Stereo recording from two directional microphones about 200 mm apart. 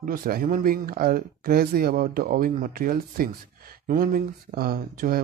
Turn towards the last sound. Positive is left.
turn(degrees=-45)  # may be behind; listen again after turning